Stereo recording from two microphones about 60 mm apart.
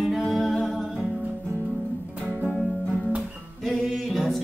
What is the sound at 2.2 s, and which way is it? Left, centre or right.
Music, right.